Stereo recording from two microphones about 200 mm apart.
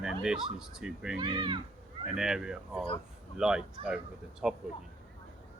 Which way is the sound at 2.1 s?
5° right (ahead or behind).